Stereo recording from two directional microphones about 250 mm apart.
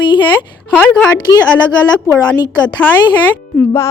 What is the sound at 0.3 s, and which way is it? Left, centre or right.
A woman's voice, centre.